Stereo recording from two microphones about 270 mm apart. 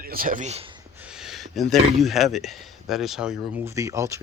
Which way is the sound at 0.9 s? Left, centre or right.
Centre.